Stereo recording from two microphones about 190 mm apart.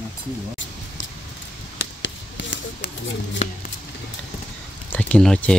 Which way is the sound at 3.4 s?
35° left (ahead or behind).